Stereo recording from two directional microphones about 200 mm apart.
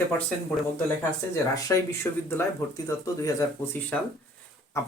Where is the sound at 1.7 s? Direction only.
10° left (ahead or behind).